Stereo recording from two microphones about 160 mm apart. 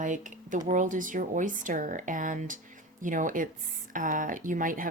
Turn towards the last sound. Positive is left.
turn(degrees=-55)  # may be behind; listen again after turning